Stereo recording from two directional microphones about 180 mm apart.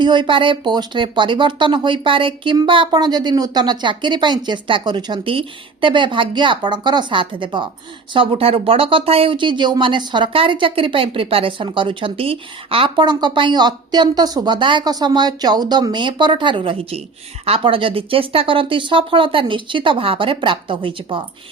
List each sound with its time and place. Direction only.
0.0 s speech: 25° right (ahead or behind)